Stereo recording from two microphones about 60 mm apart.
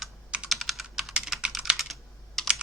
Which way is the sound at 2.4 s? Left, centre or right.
Centre.